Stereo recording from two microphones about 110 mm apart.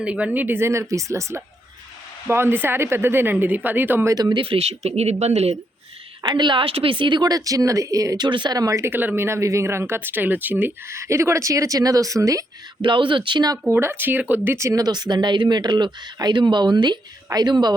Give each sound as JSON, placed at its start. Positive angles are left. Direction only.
{"t": 0.0, "sound": "a woman's voice", "side_deg": -10}
{"t": 4.1, "sound": "speech", "side_deg": -40}
{"t": 4.4, "sound": "speech", "side_deg": -60}
{"t": 4.8, "sound": "speech", "side_deg": -75}
{"t": 6.2, "sound": "speech", "side_deg": -45}
{"t": 12.8, "sound": "speech", "side_deg": -50}
{"t": 13.7, "sound": "speech", "side_deg": -20}